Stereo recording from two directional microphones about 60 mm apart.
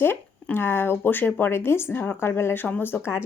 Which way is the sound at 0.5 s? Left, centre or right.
Left.